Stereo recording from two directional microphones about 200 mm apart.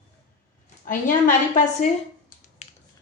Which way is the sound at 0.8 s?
40° left (ahead or behind).